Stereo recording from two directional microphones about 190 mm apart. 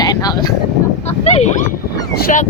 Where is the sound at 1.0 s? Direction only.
35° left (ahead or behind).